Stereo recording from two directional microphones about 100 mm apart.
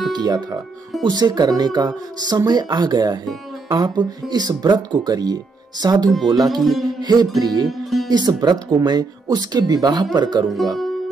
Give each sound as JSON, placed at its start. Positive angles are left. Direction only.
{"t": 0.1, "sound": "speech", "side_deg": -40}
{"t": 6.5, "sound": "music", "side_deg": 0}
{"t": 7.0, "sound": "speech", "side_deg": -45}
{"t": 7.6, "sound": "music", "side_deg": 0}
{"t": 8.1, "sound": "speech", "side_deg": -45}